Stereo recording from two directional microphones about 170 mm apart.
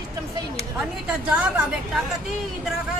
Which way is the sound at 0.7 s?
5° right (ahead or behind).